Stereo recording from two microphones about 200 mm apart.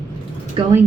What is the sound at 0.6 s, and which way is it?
Speech, 25° right (ahead or behind).